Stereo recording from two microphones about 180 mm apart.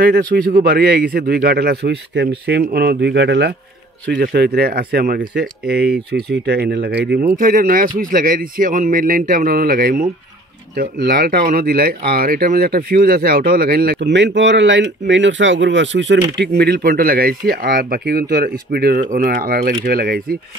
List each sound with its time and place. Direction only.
0.0 s a man's voice: 50° right (ahead or behind); by 3.5 s 70° right (ahead or behind)
4.1 s speech: 50° right (ahead or behind)